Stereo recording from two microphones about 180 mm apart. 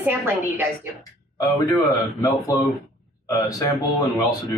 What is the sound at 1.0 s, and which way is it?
Speech, 20° left (ahead or behind).